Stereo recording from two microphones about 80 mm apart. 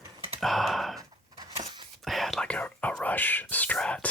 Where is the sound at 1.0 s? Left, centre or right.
Right.